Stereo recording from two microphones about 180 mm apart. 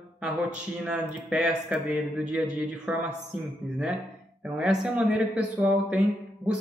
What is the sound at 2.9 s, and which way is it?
Speech, 10° right (ahead or behind).